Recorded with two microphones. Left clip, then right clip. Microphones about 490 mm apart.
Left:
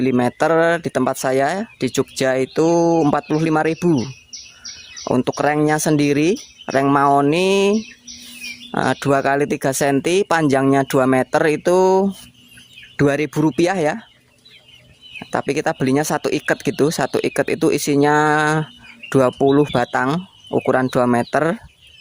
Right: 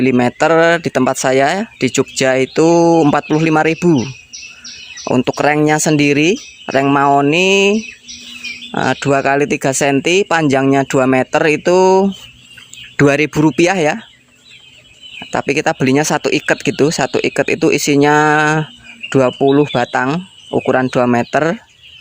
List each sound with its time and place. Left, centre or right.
0.0 s speech: left
15.2 s speech: left